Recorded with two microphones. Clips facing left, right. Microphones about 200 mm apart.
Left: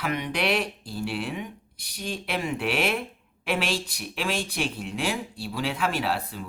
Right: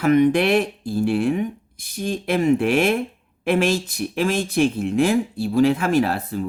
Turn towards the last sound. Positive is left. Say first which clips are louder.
# right 9 dB
turn(degrees=-45)  # may be behind; listen again after turning